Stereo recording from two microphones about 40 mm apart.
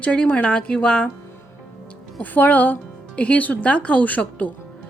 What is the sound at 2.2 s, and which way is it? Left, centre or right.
Speech, left.